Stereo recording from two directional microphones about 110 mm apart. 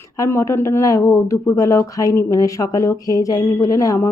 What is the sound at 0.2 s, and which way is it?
A woman's voice, 25° left (ahead or behind).